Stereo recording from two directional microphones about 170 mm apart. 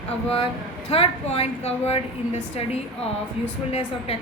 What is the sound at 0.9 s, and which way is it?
A woman's voice, 35° left (ahead or behind).